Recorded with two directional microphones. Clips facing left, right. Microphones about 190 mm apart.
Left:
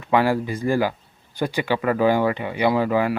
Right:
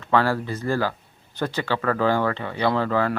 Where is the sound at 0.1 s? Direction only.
15° left (ahead or behind).